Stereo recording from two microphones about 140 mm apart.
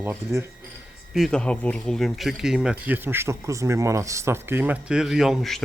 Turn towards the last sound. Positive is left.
turn(degrees=0)  # may be behind; listen again after turning